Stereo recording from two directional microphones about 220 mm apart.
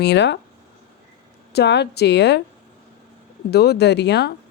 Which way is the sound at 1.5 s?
50° left (ahead or behind).